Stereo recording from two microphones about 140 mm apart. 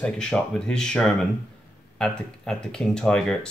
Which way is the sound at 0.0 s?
5° left (ahead or behind).